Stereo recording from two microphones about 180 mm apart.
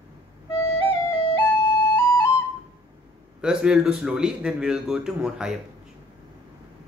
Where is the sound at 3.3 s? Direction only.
5° right (ahead or behind).